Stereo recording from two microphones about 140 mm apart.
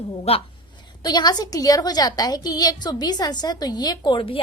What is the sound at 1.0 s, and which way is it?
A woman's voice, 30° left (ahead or behind).